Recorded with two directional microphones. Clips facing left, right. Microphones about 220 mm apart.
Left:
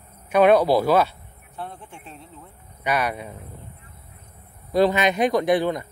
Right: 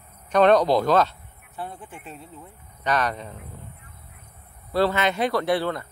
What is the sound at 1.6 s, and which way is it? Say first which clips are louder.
Speech: right 1 dB; 5° right (ahead or behind).